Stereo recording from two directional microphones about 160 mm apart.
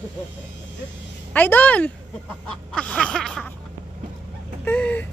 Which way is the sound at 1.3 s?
10° left (ahead or behind).